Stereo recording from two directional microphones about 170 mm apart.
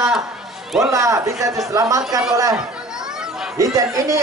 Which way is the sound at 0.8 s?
20° right (ahead or behind).